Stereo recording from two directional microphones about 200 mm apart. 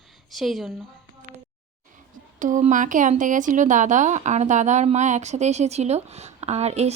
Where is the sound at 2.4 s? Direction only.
40° right (ahead or behind).